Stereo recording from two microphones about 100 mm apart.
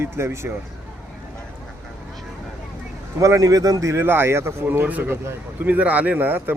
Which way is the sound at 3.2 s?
35° right (ahead or behind).